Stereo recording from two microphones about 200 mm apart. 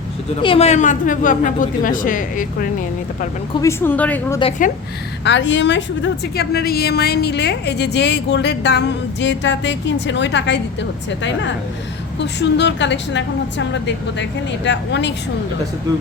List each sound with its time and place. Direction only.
0.4 s a woman's voice: 30° left (ahead or behind)
3.6 s a woman's voice: 10° left (ahead or behind)
5.2 s a woman's voice: 65° left (ahead or behind)